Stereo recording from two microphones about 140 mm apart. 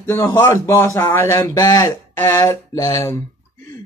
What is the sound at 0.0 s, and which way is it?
Speech, 15° left (ahead or behind).